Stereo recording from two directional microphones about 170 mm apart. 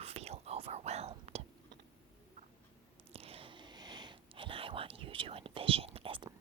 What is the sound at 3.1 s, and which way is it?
Whispering, 35° right (ahead or behind).